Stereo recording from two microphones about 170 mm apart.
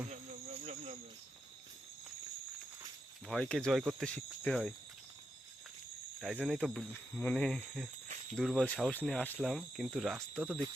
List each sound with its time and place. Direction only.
0.6 s cricket: 40° right (ahead or behind)
3.2 s speech: 5° left (ahead or behind)
6.1 s speech: centre (ahead or behind)
6.9 s speech: 10° left (ahead or behind)